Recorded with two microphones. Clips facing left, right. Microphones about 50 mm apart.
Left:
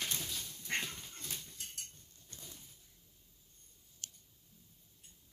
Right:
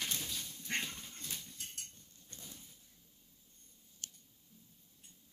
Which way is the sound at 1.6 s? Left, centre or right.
Right.